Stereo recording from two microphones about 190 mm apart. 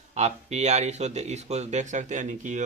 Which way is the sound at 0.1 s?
35° right (ahead or behind).